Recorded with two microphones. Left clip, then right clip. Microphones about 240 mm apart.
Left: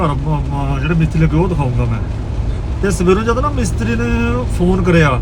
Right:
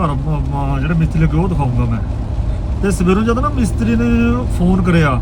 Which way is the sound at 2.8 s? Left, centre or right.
Centre.